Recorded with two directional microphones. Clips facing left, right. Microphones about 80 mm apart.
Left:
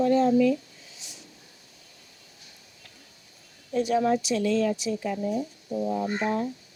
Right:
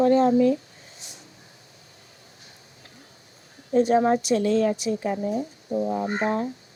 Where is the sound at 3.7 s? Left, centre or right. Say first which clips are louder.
Right 4 dB; right.